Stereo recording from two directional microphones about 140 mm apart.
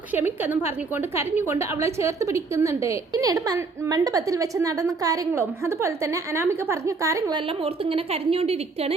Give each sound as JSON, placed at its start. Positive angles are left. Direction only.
{"t": 0.4, "sound": "a woman's voice", "side_deg": -15}
{"t": 7.3, "sound": "a woman's voice", "side_deg": -40}